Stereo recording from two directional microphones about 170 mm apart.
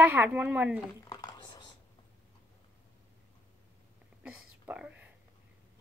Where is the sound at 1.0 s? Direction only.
25° left (ahead or behind).